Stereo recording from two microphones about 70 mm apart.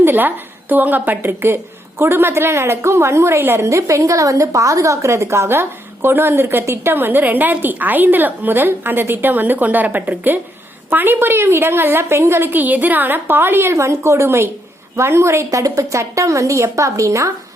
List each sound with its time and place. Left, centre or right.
0.0 s a woman's voice: right
13.7 s a woman's voice: right
15.4 s a woman's voice: right